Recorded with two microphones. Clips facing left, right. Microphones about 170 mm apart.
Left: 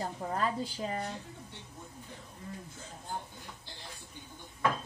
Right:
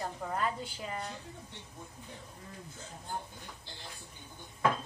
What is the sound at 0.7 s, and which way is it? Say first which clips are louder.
Speech: left 4 dB; 35° left (ahead or behind).